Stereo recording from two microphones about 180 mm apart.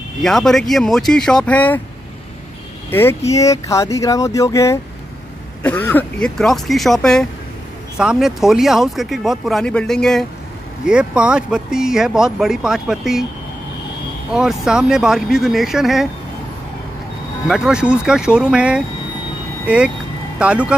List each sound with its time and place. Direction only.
0.2 s speech: centre (ahead or behind)
2.9 s speech: 10° left (ahead or behind)
14.3 s speech: 5° right (ahead or behind)
17.5 s speech: 5° right (ahead or behind)